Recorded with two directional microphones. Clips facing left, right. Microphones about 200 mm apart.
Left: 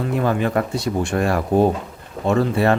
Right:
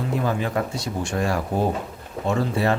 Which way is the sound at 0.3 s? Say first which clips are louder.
Left 4 dB; 60° left (ahead or behind).